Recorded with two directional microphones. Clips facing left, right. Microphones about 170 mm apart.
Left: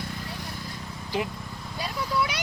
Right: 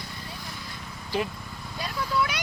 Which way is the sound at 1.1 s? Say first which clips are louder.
Right 1 dB; 20° left (ahead or behind).